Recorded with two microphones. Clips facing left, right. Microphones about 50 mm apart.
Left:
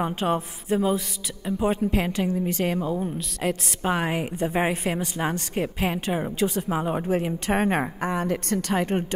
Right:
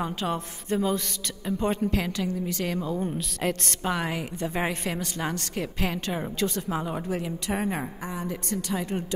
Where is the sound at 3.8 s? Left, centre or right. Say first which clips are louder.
Left 4 dB; left.